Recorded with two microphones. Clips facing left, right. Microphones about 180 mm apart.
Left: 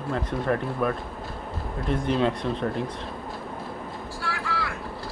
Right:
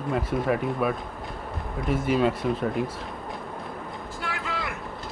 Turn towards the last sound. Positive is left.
turn(degrees=-20)  # may be behind; listen again after turning